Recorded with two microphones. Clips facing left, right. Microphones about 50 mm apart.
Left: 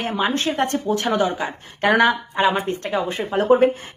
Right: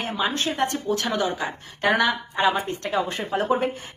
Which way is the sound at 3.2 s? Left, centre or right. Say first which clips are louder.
Left 11 dB; left.